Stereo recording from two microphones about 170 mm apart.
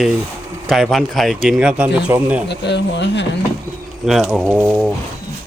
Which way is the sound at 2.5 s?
90° left.